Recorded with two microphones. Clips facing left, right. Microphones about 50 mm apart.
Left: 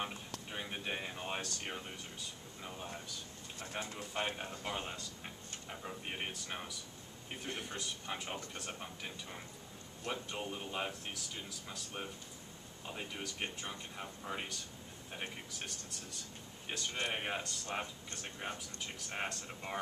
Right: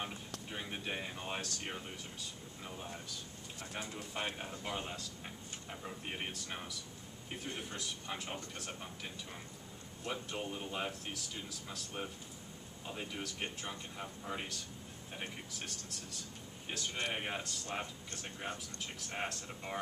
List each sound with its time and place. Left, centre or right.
0.0 s speech: centre